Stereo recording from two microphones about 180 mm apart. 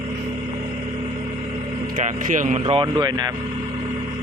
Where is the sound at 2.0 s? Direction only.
45° right (ahead or behind).